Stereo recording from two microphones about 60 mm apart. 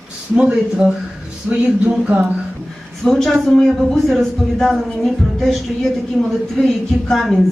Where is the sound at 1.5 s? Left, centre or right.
Right.